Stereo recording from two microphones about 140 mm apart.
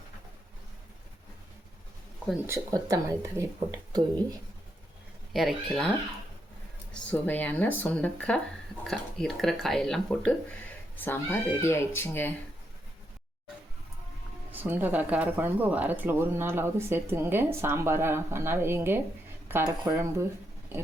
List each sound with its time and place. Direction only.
2.5 s speech: 25° right (ahead or behind)
5.3 s speech: centre (ahead or behind)
6.9 s speech: 10° left (ahead or behind)
14.5 s speech: 15° right (ahead or behind)